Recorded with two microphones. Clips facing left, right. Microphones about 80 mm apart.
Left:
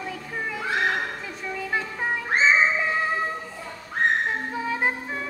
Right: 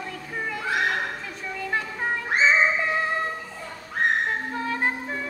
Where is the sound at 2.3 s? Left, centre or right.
Left.